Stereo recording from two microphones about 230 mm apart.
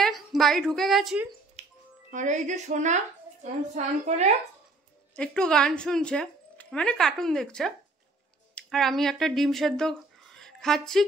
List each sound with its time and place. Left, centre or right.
0.0 s a woman's voice: centre
1.6 s a woman's voice: right
5.1 s a woman's voice: centre